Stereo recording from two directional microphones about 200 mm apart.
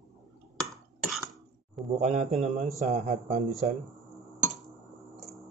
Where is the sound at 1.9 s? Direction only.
35° right (ahead or behind).